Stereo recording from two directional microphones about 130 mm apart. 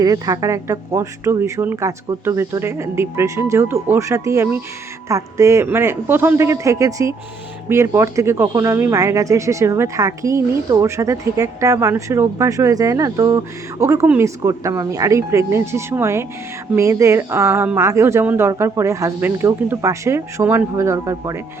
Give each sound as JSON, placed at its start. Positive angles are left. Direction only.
{"t": 0.0, "sound": "speech", "side_deg": -25}